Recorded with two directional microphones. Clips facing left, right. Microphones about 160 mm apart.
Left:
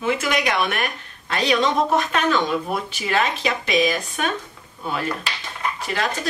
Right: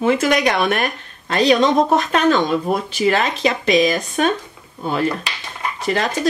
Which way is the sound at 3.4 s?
40° right (ahead or behind).